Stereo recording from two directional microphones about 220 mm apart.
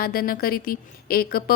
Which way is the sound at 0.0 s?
40° left (ahead or behind).